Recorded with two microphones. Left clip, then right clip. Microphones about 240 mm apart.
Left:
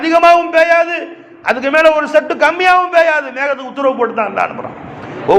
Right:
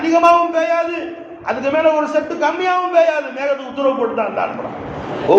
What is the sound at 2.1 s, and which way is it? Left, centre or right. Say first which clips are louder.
A man's voice: left 6 dB; left.